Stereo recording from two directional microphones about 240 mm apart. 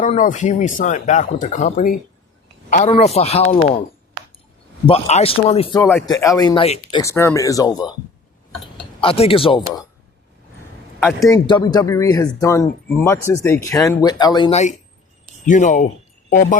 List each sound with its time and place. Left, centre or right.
0.0 s a man's voice: left
4.9 s a man's voice: left
5.8 s speech: centre
9.0 s a man's voice: left
11.0 s speech: centre
15.4 s speech: left